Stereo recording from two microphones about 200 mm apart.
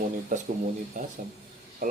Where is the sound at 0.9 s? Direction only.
40° right (ahead or behind).